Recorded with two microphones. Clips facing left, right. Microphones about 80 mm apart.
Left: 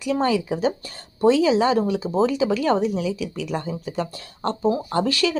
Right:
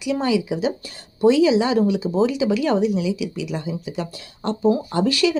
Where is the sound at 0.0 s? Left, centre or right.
Left.